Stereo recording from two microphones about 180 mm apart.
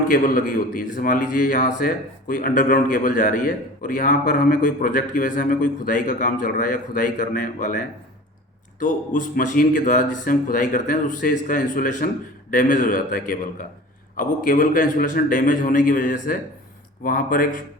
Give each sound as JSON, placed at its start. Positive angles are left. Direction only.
{"t": 0.1, "sound": "a man's voice", "side_deg": 50}